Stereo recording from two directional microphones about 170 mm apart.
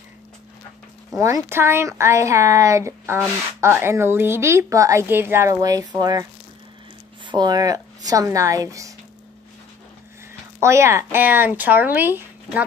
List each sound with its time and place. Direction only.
1.1 s a woman's voice: 15° right (ahead or behind)
7.2 s speech: 25° right (ahead or behind)
10.6 s a woman's voice: 15° right (ahead or behind)